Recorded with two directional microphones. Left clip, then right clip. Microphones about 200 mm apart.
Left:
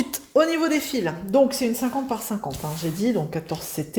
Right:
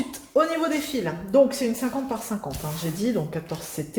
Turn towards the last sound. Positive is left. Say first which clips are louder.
# left 3 dB
turn(degrees=40)  # may be behind; listen again after turning